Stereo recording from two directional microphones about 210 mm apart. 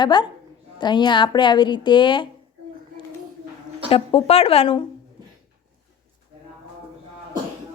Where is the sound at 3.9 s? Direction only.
25° left (ahead or behind).